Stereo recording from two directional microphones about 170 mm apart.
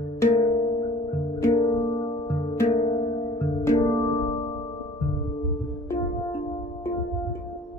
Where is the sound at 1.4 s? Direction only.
25° left (ahead or behind).